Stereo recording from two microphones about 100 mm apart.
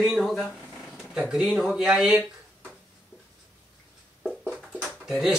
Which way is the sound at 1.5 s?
Centre (ahead or behind).